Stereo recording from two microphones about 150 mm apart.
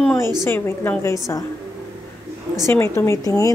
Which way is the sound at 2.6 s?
15° left (ahead or behind).